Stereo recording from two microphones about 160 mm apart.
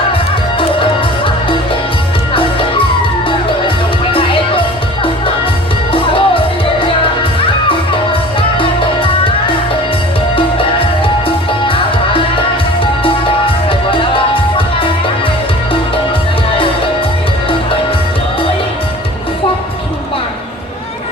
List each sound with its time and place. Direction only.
0.8 s music: 35° left (ahead or behind)
4.1 s music: 35° left (ahead or behind)
5.9 s music: 35° left (ahead or behind)
8.4 s music: 35° left (ahead or behind)
13.7 s music: 30° left (ahead or behind)